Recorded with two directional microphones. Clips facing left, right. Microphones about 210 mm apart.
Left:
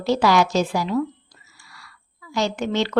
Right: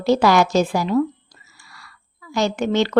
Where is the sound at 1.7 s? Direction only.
50° right (ahead or behind).